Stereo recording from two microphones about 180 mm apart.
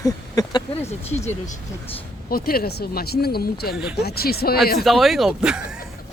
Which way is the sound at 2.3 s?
55° left (ahead or behind).